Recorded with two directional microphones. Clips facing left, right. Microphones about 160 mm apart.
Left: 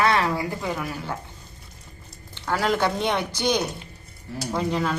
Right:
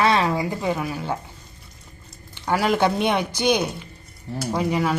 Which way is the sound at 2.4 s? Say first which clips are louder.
Right 3 dB; 15° right (ahead or behind).